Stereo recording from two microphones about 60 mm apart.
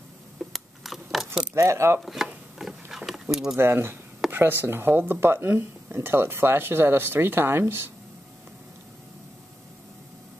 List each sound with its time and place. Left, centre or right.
0.4 s keys jangling: centre
1.5 s speech: right
2.0 s chopping: centre
2.6 s vehicle: centre
3.5 s speech: right